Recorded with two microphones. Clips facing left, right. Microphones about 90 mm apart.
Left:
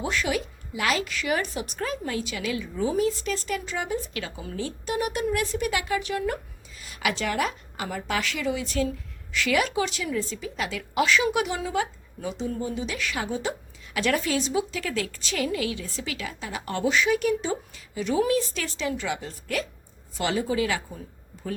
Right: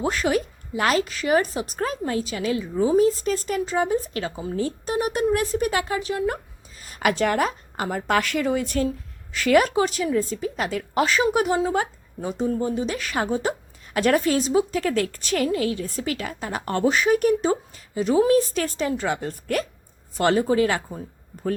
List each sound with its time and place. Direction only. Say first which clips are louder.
0.0 s a woman's voice: right 5 dB; 40° right (ahead or behind)
15.4 s a woman's voice: right 5 dB; 40° right (ahead or behind)